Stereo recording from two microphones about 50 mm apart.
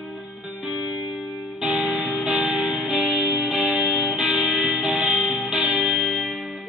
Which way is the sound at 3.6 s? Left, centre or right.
Centre.